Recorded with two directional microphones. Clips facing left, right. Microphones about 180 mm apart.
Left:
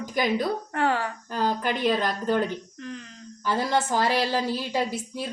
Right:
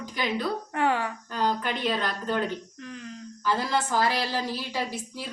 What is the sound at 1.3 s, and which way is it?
A woman's voice, 45° left (ahead or behind).